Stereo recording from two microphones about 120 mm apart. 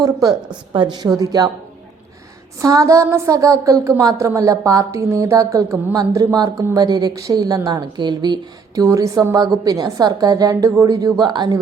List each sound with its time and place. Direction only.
0.0 s a woman's voice: 30° right (ahead or behind)
2.6 s a woman's voice: 30° right (ahead or behind)